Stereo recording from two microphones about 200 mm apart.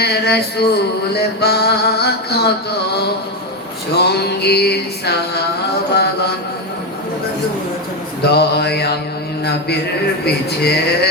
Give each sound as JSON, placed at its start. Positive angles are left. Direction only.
{"t": 0.0, "sound": "music", "side_deg": 55}
{"t": 3.9, "sound": "music", "side_deg": 55}
{"t": 8.2, "sound": "mantra", "side_deg": 55}
{"t": 9.4, "sound": "music", "side_deg": 55}